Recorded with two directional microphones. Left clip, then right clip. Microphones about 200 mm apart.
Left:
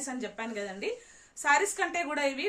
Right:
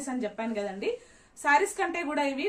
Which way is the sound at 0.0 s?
15° left (ahead or behind).